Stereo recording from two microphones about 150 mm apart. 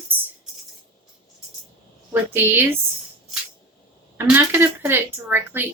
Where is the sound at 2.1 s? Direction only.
15° right (ahead or behind).